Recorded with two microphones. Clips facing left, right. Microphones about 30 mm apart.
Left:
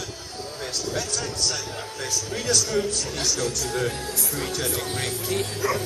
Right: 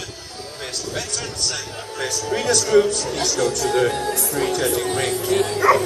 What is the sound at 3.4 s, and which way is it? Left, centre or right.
Music, right.